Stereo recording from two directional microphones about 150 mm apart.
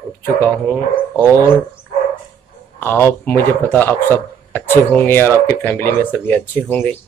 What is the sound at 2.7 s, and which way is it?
Speech, 15° left (ahead or behind).